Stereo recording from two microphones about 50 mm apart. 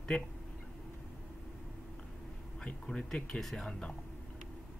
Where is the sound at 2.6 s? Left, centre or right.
Centre.